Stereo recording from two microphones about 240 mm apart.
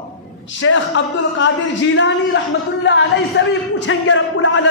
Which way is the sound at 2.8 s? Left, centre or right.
Left.